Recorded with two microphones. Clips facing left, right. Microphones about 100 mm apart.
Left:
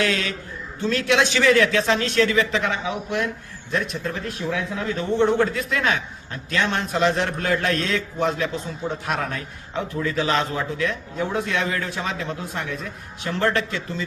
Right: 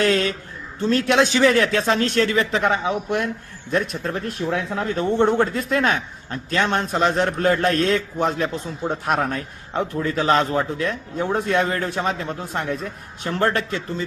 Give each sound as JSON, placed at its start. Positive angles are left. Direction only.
{"t": 0.0, "sound": "a man's voice", "side_deg": -45}